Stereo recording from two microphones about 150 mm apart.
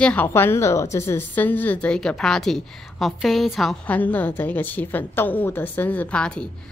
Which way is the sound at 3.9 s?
10° left (ahead or behind).